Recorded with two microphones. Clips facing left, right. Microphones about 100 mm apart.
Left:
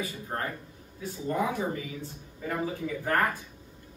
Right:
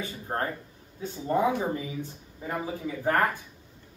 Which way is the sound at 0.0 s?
35° right (ahead or behind).